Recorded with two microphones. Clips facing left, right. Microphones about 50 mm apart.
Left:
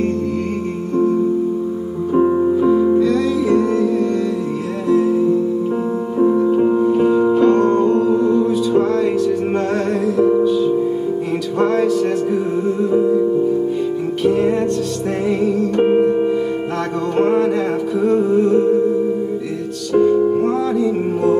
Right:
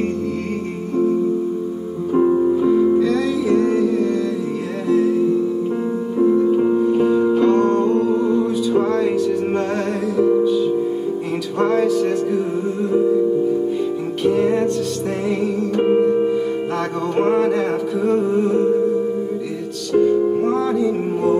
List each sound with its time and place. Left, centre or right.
2.1 s music: centre
4.8 s music: centre
6.1 s music: centre
14.2 s music: centre
15.8 s music: left
17.1 s music: centre
19.9 s music: centre